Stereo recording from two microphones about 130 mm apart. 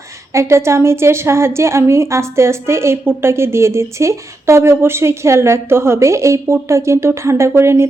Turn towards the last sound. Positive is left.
turn(degrees=-20)  # may be behind; listen again after turning